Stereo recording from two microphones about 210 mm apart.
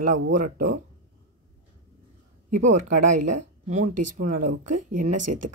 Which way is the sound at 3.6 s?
35° right (ahead or behind).